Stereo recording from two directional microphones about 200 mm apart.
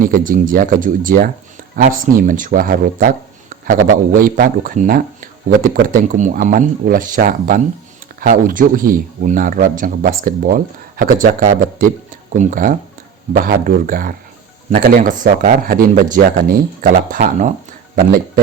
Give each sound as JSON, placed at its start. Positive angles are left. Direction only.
{"t": 0.0, "sound": "a man's voice", "side_deg": -45}